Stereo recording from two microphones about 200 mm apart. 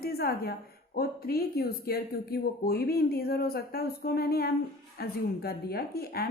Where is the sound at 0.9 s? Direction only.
50° left (ahead or behind).